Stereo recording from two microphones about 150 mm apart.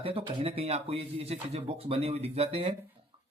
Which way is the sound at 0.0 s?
40° right (ahead or behind).